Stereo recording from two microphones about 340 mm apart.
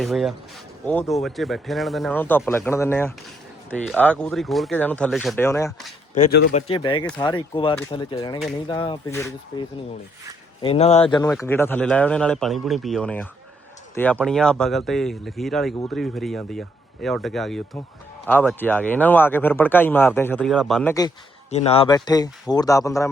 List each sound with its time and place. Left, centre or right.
0.0 s speech: centre
6.2 s speech: left; by 23.0 s centre